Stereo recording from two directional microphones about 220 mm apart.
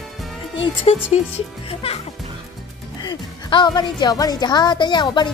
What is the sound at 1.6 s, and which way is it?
Music, 25° left (ahead or behind).